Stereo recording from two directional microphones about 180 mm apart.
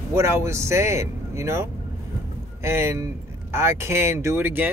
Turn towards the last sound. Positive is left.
turn(degrees=-10)  # may be behind; listen again after turning